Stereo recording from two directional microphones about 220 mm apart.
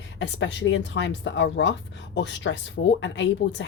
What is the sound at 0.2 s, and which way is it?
A woman's voice, 55° left (ahead or behind).